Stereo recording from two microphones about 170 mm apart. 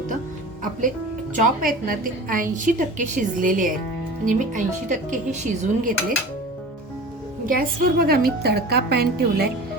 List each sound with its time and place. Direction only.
1.4 s a woman's voice: 55° right (ahead or behind)
7.4 s a woman's voice: 55° right (ahead or behind)